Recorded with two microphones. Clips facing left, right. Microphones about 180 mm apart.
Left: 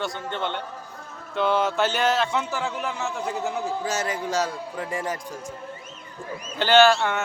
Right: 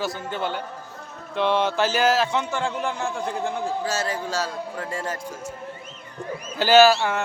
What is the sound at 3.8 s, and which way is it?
Speech, 20° left (ahead or behind).